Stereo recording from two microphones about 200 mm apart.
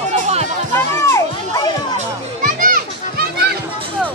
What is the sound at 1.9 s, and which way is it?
Children playing, 45° right (ahead or behind).